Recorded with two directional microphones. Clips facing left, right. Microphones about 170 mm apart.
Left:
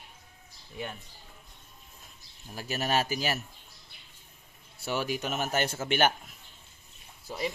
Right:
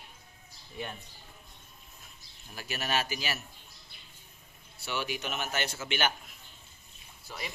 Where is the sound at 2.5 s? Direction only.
40° left (ahead or behind).